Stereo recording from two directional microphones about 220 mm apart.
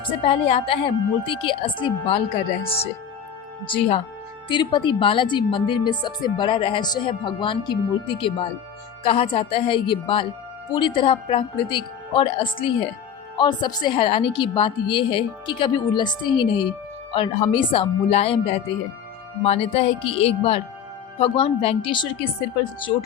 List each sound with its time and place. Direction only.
0.3 s a woman's voice: 25° left (ahead or behind)